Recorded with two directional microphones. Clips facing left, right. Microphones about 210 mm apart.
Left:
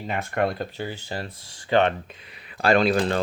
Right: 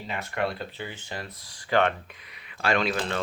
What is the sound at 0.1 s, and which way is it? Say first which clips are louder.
Speech: left 5 dB; 50° left (ahead or behind).